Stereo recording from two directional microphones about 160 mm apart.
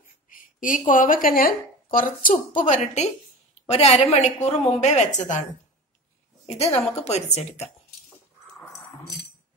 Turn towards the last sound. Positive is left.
turn(degrees=40)  # may be behind; listen again after turning